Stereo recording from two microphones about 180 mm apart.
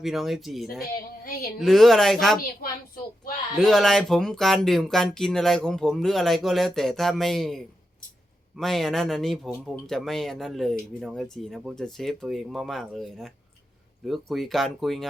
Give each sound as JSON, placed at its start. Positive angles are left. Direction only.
{"t": 0.0, "sound": "speech", "side_deg": 0}
{"t": 2.4, "sound": "speech", "side_deg": 55}
{"t": 3.6, "sound": "speech", "side_deg": 0}